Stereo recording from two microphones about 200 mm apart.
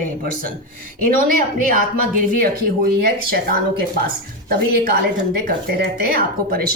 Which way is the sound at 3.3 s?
50° right (ahead or behind).